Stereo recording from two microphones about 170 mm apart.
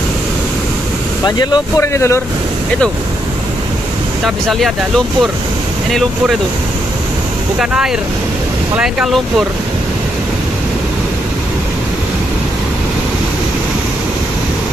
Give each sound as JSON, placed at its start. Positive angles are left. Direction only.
{"t": 1.2, "sound": "speech", "side_deg": 25}
{"t": 4.2, "sound": "speech", "side_deg": 0}
{"t": 7.5, "sound": "speech", "side_deg": -5}